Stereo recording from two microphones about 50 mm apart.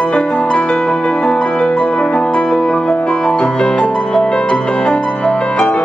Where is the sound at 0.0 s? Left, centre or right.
Left.